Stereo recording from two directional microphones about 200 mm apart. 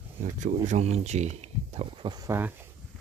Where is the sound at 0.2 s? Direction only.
40° right (ahead or behind); by 2.7 s 10° right (ahead or behind).